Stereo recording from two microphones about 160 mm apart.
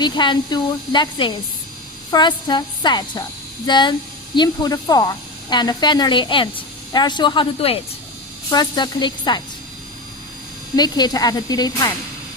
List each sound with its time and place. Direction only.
0.0 s a woman's voice: 30° left (ahead or behind)
10.8 s a woman's voice: 25° left (ahead or behind)